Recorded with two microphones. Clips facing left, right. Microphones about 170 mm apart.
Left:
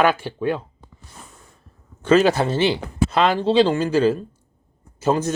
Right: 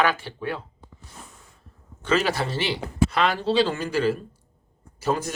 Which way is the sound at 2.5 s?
25° left (ahead or behind).